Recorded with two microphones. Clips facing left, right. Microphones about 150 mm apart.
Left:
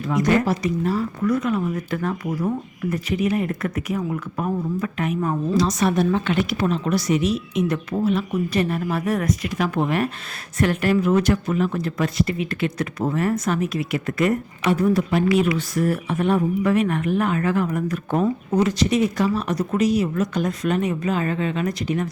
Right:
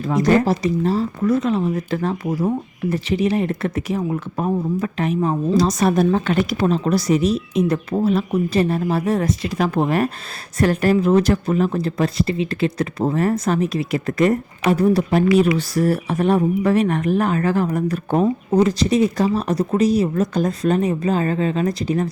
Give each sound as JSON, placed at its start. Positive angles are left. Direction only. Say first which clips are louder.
{"t": 0.0, "sound": "speech", "louder": "right 3 dB", "side_deg": -35}
{"t": 5.5, "sound": "speech", "louder": "right 3 dB", "side_deg": -40}